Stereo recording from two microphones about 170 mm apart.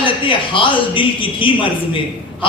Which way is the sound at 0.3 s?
30° left (ahead or behind).